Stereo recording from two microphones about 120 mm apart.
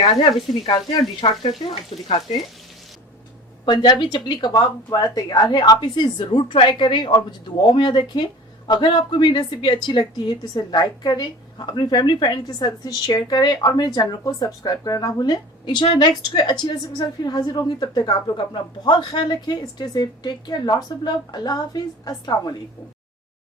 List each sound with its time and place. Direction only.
1.2 s speech: 40° left (ahead or behind)
1.9 s speech: 50° left (ahead or behind)
3.7 s speech: 35° left (ahead or behind)